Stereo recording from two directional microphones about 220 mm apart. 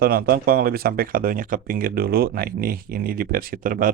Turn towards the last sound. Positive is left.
turn(degrees=-40)  # may be behind; listen again after turning